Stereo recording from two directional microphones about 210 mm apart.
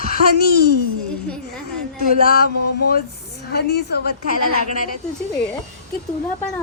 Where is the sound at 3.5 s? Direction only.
50° left (ahead or behind).